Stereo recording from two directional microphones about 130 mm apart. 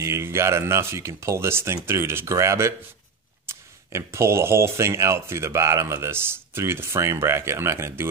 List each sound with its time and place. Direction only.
0.0 s speech: 20° right (ahead or behind)